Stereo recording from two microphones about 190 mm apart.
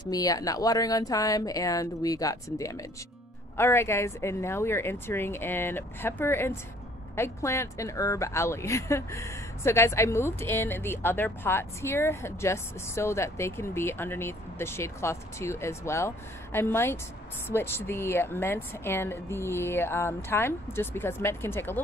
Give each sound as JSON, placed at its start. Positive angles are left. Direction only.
{"t": 0.0, "sound": "speech", "side_deg": 20}